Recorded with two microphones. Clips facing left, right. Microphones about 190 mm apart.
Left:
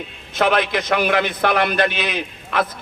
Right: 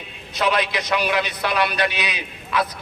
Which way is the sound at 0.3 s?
50° left (ahead or behind).